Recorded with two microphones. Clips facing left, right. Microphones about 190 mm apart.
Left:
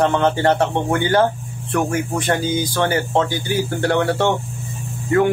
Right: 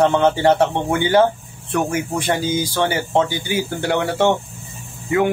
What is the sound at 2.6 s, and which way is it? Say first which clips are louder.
A man's voice: left 1 dB; 10° right (ahead or behind).